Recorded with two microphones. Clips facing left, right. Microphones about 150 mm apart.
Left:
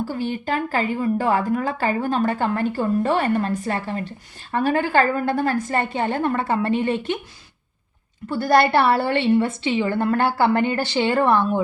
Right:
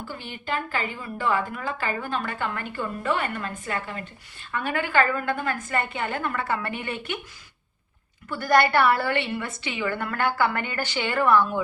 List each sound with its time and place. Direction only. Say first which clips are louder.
0.1 s speech: left 7 dB; 40° left (ahead or behind)
8.3 s a woman's voice: left 4 dB; 30° left (ahead or behind)